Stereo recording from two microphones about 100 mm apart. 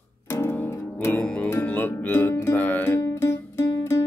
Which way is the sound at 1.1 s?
10° left (ahead or behind).